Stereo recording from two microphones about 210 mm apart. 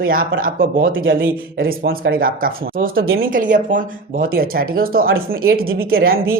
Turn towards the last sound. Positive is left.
turn(degrees=-45)  # may be behind; listen again after turning